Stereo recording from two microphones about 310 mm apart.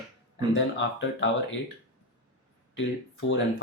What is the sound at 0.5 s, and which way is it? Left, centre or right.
Speech, left.